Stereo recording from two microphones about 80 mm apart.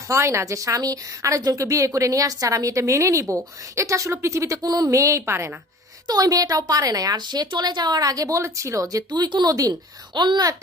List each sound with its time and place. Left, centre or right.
0.1 s a woman's voice: right
6.1 s a woman's voice: right
9.0 s speech: right
10.2 s a child's voice: right